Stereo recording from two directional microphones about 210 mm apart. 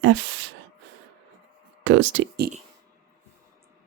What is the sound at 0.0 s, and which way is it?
Speech, 65° right (ahead or behind).